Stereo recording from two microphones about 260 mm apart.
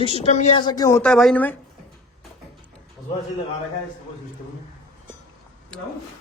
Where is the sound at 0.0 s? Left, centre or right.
Left; by 1.5 s centre.